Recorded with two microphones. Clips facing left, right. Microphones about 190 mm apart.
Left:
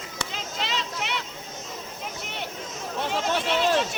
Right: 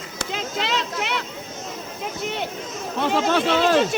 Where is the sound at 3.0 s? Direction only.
90° right.